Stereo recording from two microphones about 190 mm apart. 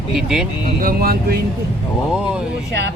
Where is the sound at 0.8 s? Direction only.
50° right (ahead or behind).